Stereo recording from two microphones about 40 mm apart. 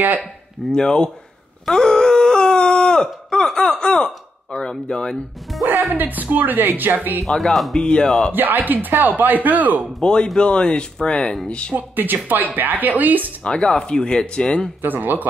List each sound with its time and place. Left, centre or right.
0.2 s speech: centre
1.7 s a sound: centre
5.5 s speech: centre
5.9 s speech: right
7.2 s speech: centre
7.7 s speech: centre
8.3 s speech: right
10.2 s speech: centre
11.7 s speech: right
13.4 s speech: left
14.8 s speech: right